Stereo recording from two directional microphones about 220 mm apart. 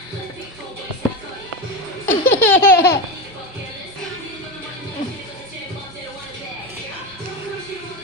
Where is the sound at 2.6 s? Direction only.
45° left (ahead or behind).